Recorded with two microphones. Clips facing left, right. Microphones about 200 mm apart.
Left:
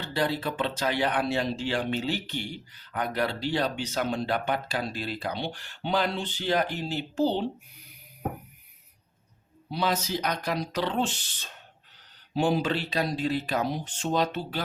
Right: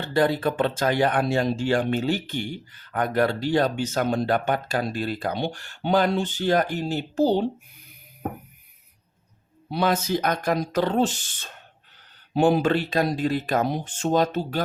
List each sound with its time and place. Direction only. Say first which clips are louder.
0.0 s speech: right 7 dB; 50° right (ahead or behind)
9.7 s speech: right 5 dB; 50° right (ahead or behind)